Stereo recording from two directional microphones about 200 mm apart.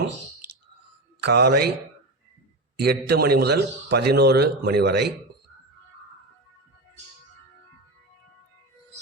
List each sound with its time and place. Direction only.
1.2 s a man's voice: 55° right (ahead or behind)
2.8 s a man's voice: 55° right (ahead or behind)